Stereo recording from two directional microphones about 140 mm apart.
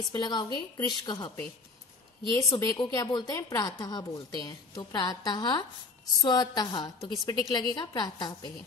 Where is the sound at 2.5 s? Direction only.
30° left (ahead or behind).